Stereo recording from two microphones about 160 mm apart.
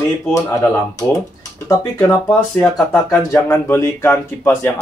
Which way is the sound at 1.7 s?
15° left (ahead or behind).